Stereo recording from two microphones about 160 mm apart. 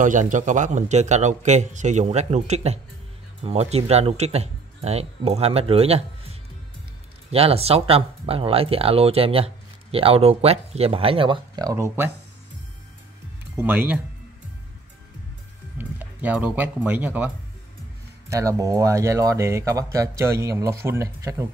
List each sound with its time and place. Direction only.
0.0 s a man's voice: 50° right (ahead or behind); by 12.1 s 15° right (ahead or behind)
13.6 s speech: 10° right (ahead or behind)
15.8 s speech: 10° right (ahead or behind)
18.3 s speech: 20° right (ahead or behind)